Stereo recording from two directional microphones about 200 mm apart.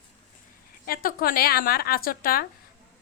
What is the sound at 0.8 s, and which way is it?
A woman's voice, 45° left (ahead or behind).